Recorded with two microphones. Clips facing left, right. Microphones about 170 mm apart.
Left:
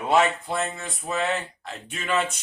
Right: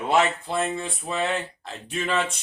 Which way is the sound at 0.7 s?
30° right (ahead or behind).